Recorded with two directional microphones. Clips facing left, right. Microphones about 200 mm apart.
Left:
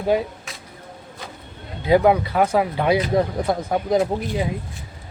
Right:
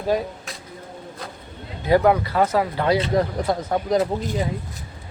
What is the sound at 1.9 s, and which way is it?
Speech, 15° left (ahead or behind).